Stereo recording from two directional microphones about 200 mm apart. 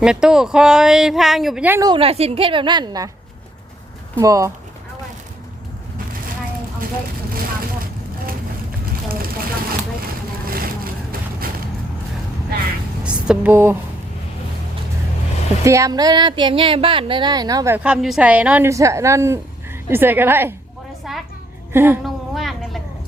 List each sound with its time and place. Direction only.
0.0 s speech: 5° right (ahead or behind)
1.9 s speech: 30° right (ahead or behind)
4.2 s a woman's voice: 15° right (ahead or behind)
9.0 s vehicle: 45° right (ahead or behind)
13.1 s speech: 5° right (ahead or behind)
15.6 s speech: 15° right (ahead or behind)
17.8 s a woman's voice: 5° right (ahead or behind)
21.1 s a sound: centre (ahead or behind)
21.7 s a woman's voice: 10° right (ahead or behind)
22.0 s a sound: centre (ahead or behind)